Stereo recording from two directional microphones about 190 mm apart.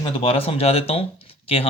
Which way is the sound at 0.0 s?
30° left (ahead or behind).